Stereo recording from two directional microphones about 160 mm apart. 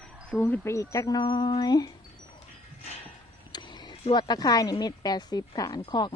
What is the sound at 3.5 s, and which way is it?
Speech, 25° left (ahead or behind).